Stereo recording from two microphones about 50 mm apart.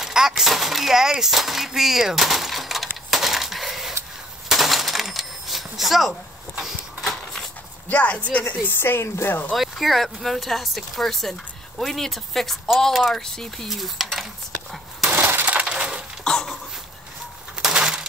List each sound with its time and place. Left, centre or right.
0.0 s a sound: centre
0.4 s speech: centre
3.1 s a sound: centre
4.5 s coin: centre
6.6 s a sound: centre
7.9 s speech: left
8.5 s speech: left
9.6 s speech: centre
13.7 s a sound: centre
15.1 s coin: right
15.6 s crushing: centre
16.3 s dog: centre
17.7 s coin: centre